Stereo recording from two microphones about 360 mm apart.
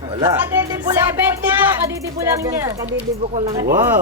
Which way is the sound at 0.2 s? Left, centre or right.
Centre.